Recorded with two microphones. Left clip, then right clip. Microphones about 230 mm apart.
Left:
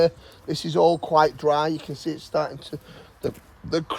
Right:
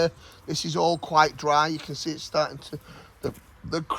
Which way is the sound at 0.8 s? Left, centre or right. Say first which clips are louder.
Left 3 dB; right.